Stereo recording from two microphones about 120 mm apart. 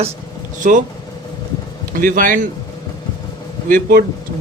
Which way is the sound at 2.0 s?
90° right.